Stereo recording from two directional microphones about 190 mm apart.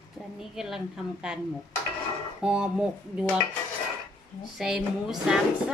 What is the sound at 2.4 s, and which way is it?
Speech, 5° right (ahead or behind).